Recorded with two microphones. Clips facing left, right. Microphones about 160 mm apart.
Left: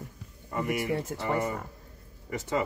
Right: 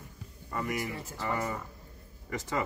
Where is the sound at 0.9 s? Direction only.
65° left (ahead or behind).